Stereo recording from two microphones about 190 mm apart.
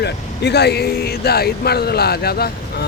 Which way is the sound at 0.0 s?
60° left (ahead or behind).